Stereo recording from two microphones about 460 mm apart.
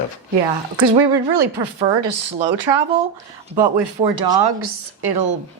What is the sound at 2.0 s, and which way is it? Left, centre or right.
Speech, right.